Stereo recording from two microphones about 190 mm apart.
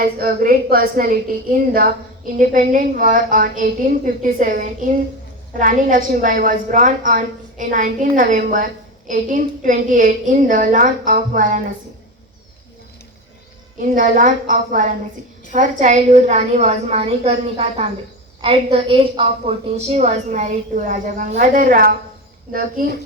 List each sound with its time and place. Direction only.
0.0 s a woman's voice: 50° right (ahead or behind)
13.9 s a woman's voice: 45° right (ahead or behind)